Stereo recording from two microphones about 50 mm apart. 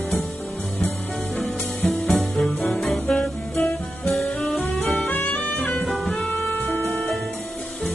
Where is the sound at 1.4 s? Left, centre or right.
Centre.